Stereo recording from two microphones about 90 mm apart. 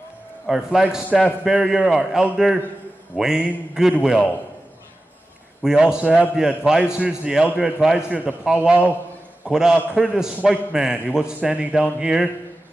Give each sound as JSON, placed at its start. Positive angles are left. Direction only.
{"t": 0.5, "sound": "a man's voice", "side_deg": -5}
{"t": 5.6, "sound": "a man's voice", "side_deg": -5}